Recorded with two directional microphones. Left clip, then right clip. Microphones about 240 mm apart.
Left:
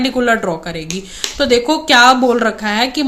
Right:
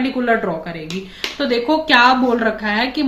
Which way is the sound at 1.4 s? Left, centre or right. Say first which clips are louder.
Left 4 dB; left.